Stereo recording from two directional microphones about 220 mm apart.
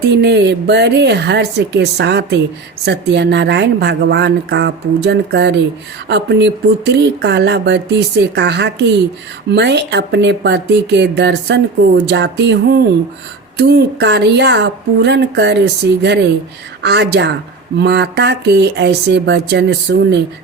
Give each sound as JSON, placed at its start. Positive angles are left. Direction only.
{"t": 0.2, "sound": "speech", "side_deg": -50}